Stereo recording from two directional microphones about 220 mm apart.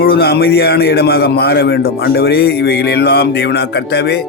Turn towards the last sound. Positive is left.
turn(degrees=50)  # may be behind; listen again after turning